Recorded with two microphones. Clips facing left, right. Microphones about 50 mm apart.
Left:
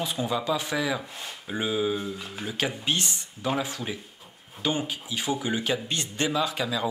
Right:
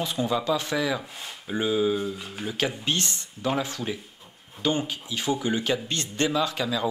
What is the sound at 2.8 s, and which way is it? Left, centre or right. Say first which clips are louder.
Speech: even; centre.